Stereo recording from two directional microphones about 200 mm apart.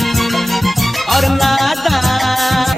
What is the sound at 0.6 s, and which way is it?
Music, centre (ahead or behind).